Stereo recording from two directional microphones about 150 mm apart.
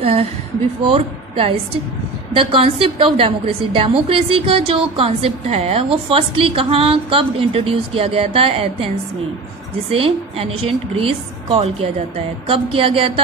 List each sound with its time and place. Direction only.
0.0 s a woman's voice: 40° right (ahead or behind)